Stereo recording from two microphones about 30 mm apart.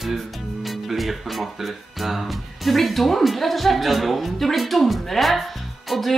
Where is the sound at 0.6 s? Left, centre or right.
Centre.